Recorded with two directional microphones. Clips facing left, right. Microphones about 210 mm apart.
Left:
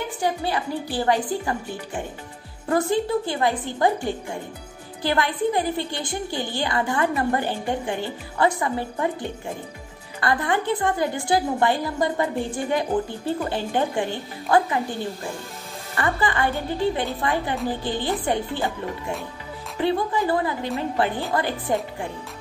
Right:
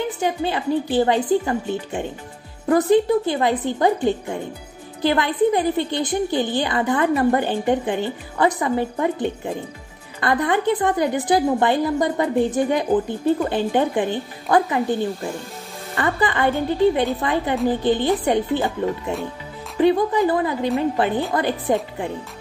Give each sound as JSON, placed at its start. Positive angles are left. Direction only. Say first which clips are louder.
{"t": 0.2, "sound": "a woman's voice", "louder": "left 1 dB", "side_deg": -20}
{"t": 10.2, "sound": "a woman's voice", "louder": "right 4 dB", "side_deg": -20}
{"t": 16.0, "sound": "a woman's voice", "louder": "right 3 dB", "side_deg": -20}